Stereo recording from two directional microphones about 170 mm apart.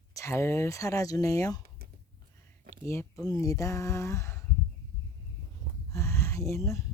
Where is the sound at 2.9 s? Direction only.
15° left (ahead or behind).